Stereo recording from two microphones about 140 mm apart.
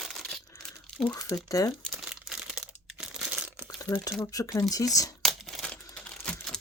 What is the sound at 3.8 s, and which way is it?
Speech, 25° left (ahead or behind).